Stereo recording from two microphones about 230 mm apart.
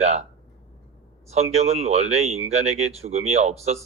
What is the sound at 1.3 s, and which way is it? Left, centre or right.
Speech, right.